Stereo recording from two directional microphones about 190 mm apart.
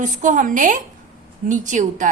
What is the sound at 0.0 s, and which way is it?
A woman's voice, 40° right (ahead or behind).